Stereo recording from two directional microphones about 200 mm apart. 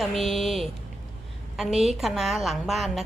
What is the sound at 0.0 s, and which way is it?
A woman's voice, centre (ahead or behind).